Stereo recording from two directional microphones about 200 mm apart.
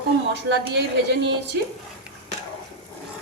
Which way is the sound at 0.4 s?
60° right (ahead or behind).